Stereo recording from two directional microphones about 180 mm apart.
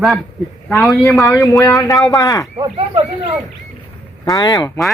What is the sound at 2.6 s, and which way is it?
Speech, 25° right (ahead or behind).